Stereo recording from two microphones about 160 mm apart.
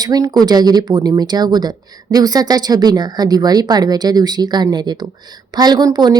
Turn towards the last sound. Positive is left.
turn(degrees=-25)  # may be behind; listen again after turning